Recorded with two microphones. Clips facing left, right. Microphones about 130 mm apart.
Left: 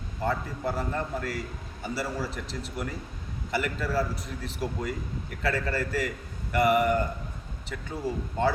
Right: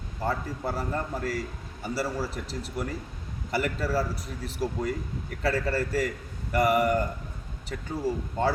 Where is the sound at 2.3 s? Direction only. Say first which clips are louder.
Right 1 dB; 40° right (ahead or behind).